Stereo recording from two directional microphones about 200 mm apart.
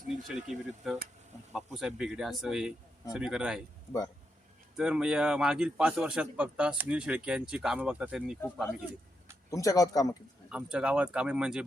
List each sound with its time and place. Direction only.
0.3 s a man's voice: centre (ahead or behind)
4.8 s a man's voice: 5° right (ahead or behind)
9.5 s speech: 15° left (ahead or behind)
10.5 s a man's voice: 5° right (ahead or behind)